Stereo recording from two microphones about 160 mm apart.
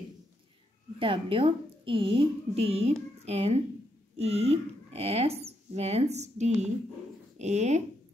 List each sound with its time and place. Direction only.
0.9 s speech: 35° right (ahead or behind)